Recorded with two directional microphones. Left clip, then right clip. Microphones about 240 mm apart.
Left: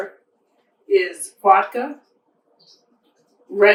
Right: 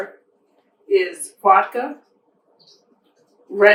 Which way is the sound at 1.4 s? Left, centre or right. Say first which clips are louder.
Even; centre.